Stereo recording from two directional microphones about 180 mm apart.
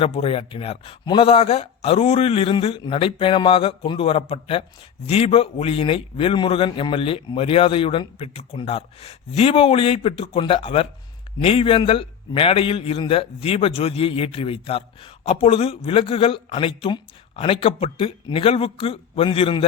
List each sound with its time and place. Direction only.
0.0 s a man's voice: 30° left (ahead or behind)